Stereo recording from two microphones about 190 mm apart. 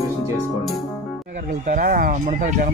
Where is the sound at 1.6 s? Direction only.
45° right (ahead or behind).